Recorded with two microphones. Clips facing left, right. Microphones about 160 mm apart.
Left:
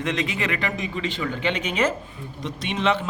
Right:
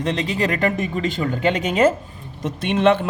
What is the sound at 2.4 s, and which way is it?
Speech, 55° right (ahead or behind).